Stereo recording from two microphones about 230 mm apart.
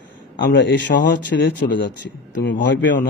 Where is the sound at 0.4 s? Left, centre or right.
Left.